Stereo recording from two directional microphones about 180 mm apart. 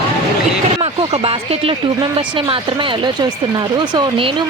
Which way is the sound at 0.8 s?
35° right (ahead or behind).